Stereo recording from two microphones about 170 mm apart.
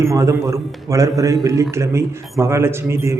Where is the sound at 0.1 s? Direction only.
20° right (ahead or behind).